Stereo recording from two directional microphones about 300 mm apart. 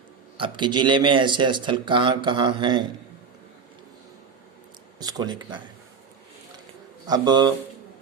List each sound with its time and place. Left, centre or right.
0.3 s speech: centre
4.9 s speech: centre
7.1 s speech: centre